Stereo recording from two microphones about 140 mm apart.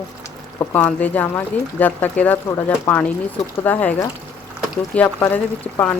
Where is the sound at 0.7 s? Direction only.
10° left (ahead or behind).